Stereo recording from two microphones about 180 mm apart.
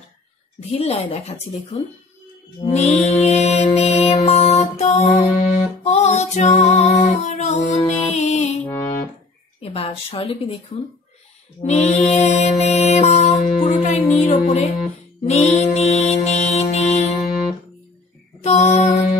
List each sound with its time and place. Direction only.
0.6 s music: 35° left (ahead or behind)
8.6 s music: 15° left (ahead or behind)
9.6 s a woman's voice: 30° left (ahead or behind)
11.6 s music: 40° left (ahead or behind)
18.4 s female singing: 40° left (ahead or behind)